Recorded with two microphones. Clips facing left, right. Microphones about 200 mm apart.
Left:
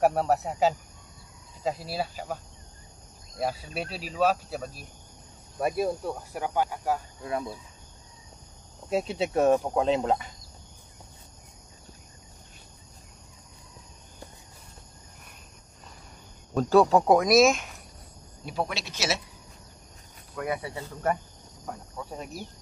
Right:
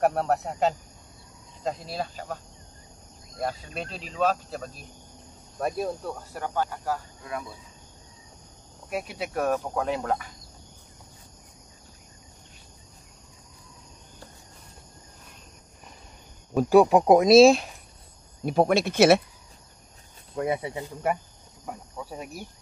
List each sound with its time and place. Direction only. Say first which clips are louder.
0.0 s speech: even; centre (ahead or behind)
3.3 s speech: left 1 dB; 5° left (ahead or behind)
7.2 s speech: left 4 dB; 30° left (ahead or behind)
8.8 s speech: left 5 dB; 25° left (ahead or behind)
16.5 s speech: right 2 dB; 15° right (ahead or behind); by 17.6 s 30° right (ahead or behind)
18.4 s speech: right 10 dB; 50° right (ahead or behind)
20.3 s speech: right 4 dB; 25° right (ahead or behind)
21.6 s cricket: right 1 dB; 5° right (ahead or behind)